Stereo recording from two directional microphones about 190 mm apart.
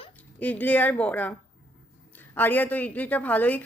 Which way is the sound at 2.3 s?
10° left (ahead or behind).